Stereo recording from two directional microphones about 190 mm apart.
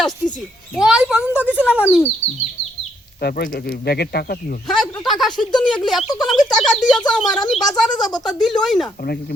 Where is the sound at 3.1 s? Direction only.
55° left (ahead or behind).